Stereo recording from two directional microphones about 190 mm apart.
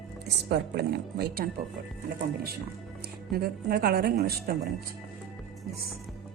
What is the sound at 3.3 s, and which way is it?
Speech, 55° right (ahead or behind).